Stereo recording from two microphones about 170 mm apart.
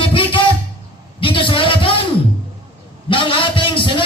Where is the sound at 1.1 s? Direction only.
30° left (ahead or behind).